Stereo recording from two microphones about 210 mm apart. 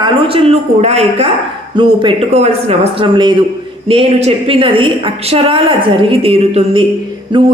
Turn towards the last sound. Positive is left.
turn(degrees=-20)  # may be behind; listen again after turning